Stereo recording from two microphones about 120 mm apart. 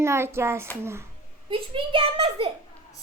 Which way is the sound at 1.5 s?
45° right (ahead or behind).